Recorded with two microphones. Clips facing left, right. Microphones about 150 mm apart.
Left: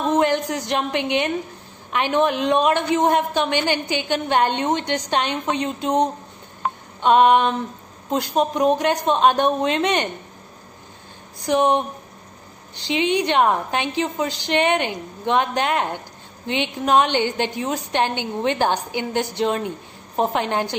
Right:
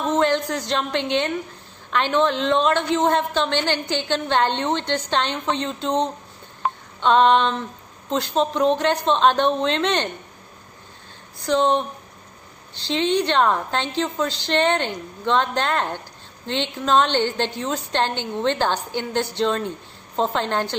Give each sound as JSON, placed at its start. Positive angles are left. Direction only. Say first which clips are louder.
{"t": 0.0, "sound": "a woman's voice", "louder": "left 1 dB", "side_deg": 15}
{"t": 11.4, "sound": "a woman's voice", "louder": "left 1 dB", "side_deg": 15}
{"t": 12.8, "sound": "a woman's voice", "louder": "even", "side_deg": 15}